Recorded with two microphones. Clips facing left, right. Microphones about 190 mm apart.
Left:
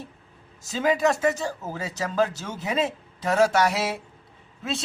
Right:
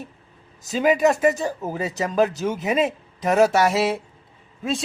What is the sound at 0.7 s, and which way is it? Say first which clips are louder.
Speech: right 4 dB; 15° right (ahead or behind).